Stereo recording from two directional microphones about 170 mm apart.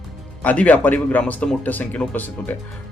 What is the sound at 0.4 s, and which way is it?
Speech, 10° left (ahead or behind).